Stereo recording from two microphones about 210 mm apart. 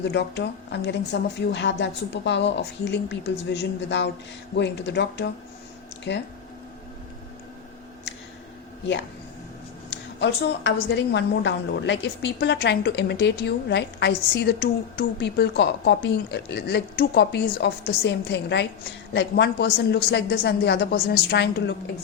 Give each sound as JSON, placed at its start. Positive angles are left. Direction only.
{"t": 0.0, "sound": "a woman's voice", "side_deg": 55}
{"t": 9.9, "sound": "a woman's voice", "side_deg": 55}